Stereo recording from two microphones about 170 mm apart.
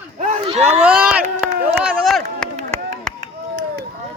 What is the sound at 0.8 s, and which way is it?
Speech, 5° right (ahead or behind).